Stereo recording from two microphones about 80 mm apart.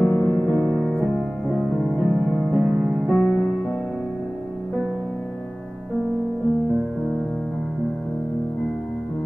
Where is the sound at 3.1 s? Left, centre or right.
Left.